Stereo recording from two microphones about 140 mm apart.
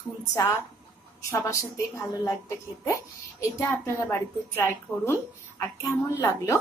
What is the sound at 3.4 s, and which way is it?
A woman's voice, 20° left (ahead or behind).